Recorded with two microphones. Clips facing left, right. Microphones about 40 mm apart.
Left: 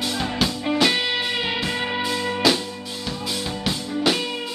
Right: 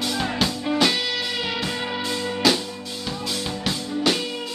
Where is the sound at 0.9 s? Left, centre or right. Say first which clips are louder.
Left 2 dB; left.